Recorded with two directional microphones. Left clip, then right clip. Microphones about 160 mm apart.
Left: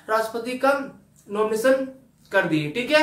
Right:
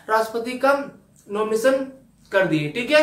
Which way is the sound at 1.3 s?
10° left (ahead or behind).